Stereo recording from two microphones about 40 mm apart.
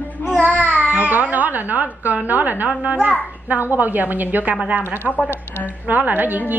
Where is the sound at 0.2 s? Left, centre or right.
Left.